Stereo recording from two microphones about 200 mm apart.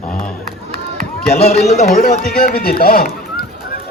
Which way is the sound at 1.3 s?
30° left (ahead or behind).